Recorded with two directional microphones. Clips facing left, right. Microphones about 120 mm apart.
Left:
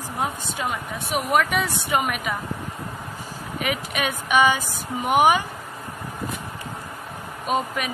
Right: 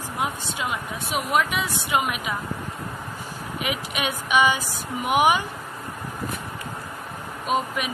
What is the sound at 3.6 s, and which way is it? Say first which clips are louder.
Speech: left 2 dB; 45° left (ahead or behind).